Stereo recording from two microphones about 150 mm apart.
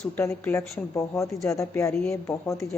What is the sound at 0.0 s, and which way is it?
A woman's voice, 15° left (ahead or behind).